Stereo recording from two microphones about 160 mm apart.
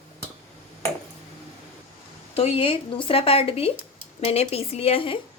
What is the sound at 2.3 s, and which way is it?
Speech, 35° left (ahead or behind).